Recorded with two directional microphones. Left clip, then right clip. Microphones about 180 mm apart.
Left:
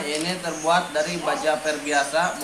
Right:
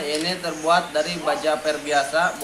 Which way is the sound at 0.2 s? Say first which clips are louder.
Right 1 dB; 15° right (ahead or behind).